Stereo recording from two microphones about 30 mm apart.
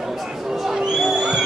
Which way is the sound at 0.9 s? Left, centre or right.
Centre.